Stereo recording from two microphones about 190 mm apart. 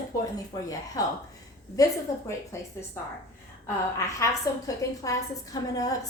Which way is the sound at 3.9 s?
15° left (ahead or behind).